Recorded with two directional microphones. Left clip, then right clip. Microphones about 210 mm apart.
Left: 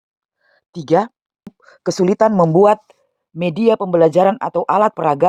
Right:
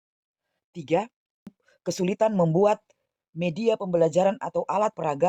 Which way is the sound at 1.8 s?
20° left (ahead or behind).